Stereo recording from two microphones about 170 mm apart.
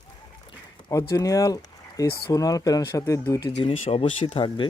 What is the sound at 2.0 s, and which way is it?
Speech, 65° left (ahead or behind).